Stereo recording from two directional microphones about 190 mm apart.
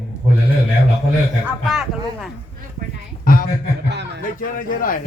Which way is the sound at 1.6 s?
Centre (ahead or behind).